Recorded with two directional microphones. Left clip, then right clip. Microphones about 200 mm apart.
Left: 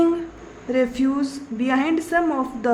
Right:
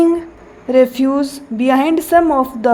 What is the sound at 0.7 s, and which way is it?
A woman's voice, 30° right (ahead or behind).